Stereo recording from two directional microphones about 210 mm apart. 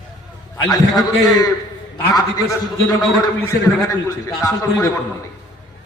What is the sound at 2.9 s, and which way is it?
Speech, 15° left (ahead or behind).